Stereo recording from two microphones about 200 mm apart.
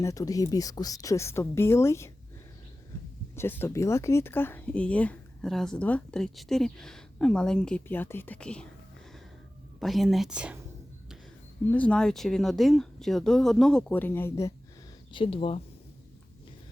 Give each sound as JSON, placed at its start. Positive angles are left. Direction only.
{"t": 0.0, "sound": "speech", "side_deg": 15}
{"t": 3.3, "sound": "speech", "side_deg": 10}
{"t": 9.8, "sound": "speech", "side_deg": 0}
{"t": 11.6, "sound": "speech", "side_deg": 5}
{"t": 15.1, "sound": "speech", "side_deg": 25}